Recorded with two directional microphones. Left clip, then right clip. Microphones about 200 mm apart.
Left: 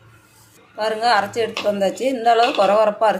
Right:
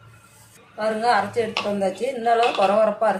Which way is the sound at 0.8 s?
45° left (ahead or behind).